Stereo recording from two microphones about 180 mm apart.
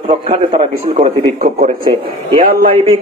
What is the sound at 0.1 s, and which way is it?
A man's voice, 35° right (ahead or behind).